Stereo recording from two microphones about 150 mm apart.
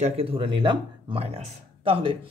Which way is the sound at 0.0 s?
40° right (ahead or behind).